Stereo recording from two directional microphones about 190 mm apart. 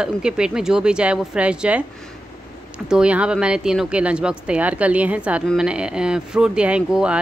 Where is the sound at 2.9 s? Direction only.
5° right (ahead or behind).